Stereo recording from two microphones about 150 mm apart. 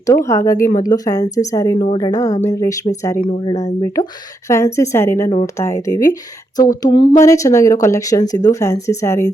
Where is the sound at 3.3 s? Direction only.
35° left (ahead or behind).